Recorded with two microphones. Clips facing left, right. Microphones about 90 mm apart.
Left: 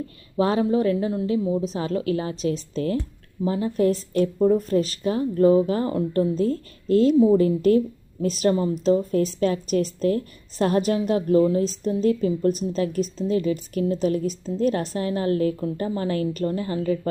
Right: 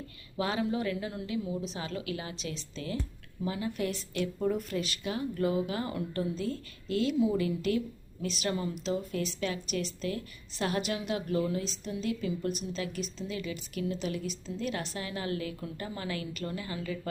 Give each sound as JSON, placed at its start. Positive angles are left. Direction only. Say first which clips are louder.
{"t": 0.3, "sound": "a woman's voice", "louder": "left 10 dB", "side_deg": 35}